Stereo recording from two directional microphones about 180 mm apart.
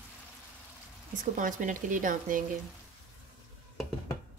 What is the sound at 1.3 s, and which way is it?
A woman's voice, 45° right (ahead or behind).